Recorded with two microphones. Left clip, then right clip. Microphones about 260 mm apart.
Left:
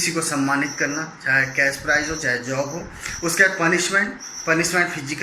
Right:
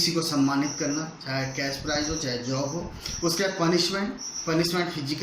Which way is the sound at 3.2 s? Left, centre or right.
Right.